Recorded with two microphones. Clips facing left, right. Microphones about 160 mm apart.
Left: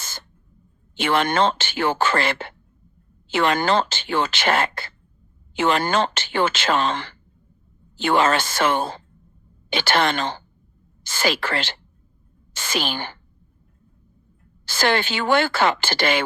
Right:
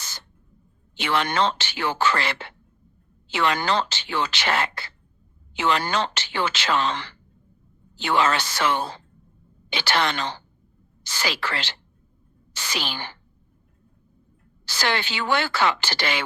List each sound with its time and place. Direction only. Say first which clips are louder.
0.0 s a sound: left 3 dB; 50° left (ahead or behind)
0.9 s a woman's voice: left 4 dB; 50° left (ahead or behind)
14.6 s speech: left 5 dB; 50° left (ahead or behind)